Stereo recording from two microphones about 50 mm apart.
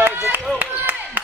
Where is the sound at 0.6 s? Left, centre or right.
Right.